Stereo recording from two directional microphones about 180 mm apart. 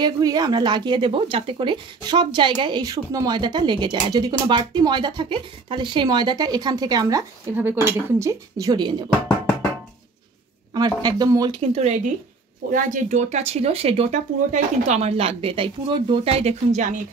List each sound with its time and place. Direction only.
0.0 s speech: 20° right (ahead or behind)
10.7 s speech: 20° right (ahead or behind)
11.6 s speech: 35° right (ahead or behind)